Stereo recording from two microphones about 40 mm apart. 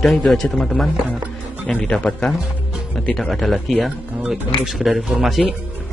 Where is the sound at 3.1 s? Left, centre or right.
Centre.